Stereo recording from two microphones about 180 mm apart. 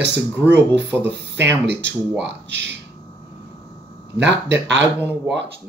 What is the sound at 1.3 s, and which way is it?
Speech, 75° right (ahead or behind).